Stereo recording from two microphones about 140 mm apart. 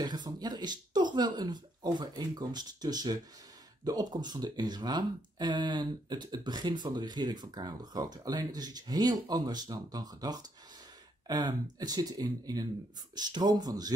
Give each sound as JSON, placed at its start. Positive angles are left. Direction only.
{"t": 0.0, "sound": "speech", "side_deg": -30}